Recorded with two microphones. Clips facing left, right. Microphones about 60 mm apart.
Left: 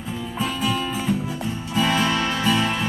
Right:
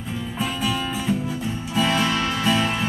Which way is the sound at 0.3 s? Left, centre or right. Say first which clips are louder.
Left 1 dB; centre.